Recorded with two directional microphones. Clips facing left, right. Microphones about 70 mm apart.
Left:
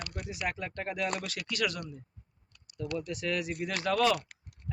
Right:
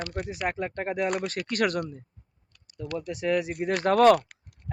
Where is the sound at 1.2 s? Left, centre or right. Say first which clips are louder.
Right 7 dB; right.